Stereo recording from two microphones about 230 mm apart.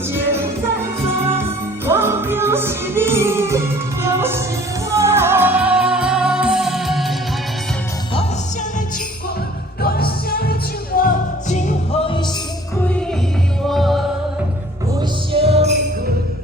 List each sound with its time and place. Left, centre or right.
1.8 s music: centre
9.8 s music: left
13.7 s music: centre
15.3 s music: right